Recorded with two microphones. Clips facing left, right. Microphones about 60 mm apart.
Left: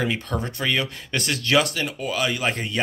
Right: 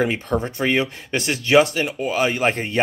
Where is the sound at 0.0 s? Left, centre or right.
Right.